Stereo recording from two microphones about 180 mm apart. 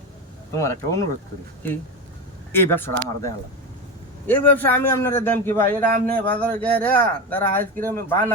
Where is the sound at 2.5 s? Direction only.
10° left (ahead or behind).